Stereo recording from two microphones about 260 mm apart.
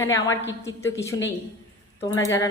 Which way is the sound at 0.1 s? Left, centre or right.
Left.